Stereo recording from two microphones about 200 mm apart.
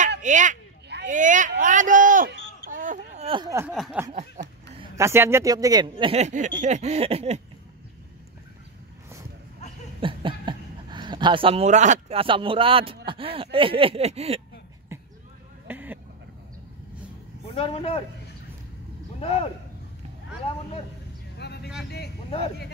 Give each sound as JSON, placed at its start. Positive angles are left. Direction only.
{"t": 0.2, "sound": "a sound", "side_deg": -40}
{"t": 3.3, "sound": "speech", "side_deg": -20}
{"t": 3.7, "sound": "a sound", "side_deg": 0}
{"t": 4.4, "sound": "a sound", "side_deg": -35}
{"t": 4.9, "sound": "speech", "side_deg": -15}
{"t": 9.9, "sound": "speech", "side_deg": -25}
{"t": 14.9, "sound": "basketball bounce", "side_deg": -15}
{"t": 15.6, "sound": "vehicle", "side_deg": -10}
{"t": 17.6, "sound": "a man's voice", "side_deg": 30}
{"t": 19.1, "sound": "speech", "side_deg": 25}
{"t": 21.4, "sound": "vehicle", "side_deg": 55}